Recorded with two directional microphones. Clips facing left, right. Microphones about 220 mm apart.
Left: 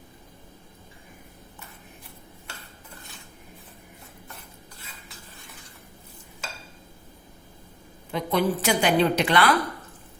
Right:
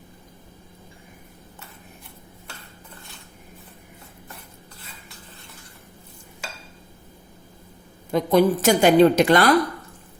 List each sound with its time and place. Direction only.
8.1 s a woman's voice: 45° right (ahead or behind)